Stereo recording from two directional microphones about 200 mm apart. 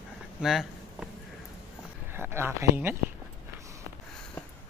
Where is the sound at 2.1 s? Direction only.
10° right (ahead or behind).